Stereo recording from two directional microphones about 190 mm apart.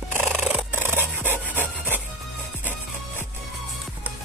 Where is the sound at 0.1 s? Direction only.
10° right (ahead or behind).